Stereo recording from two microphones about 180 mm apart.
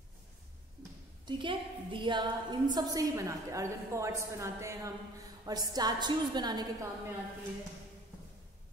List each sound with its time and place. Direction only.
1.2 s a woman's voice: 25° right (ahead or behind)